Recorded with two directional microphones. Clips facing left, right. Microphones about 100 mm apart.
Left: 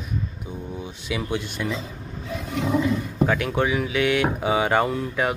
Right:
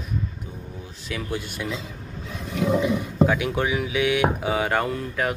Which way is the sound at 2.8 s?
10° right (ahead or behind).